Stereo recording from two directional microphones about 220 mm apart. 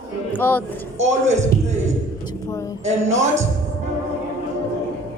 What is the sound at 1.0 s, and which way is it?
Speech, 30° right (ahead or behind).